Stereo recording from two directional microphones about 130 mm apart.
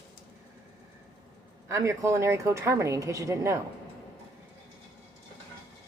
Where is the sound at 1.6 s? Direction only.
25° right (ahead or behind).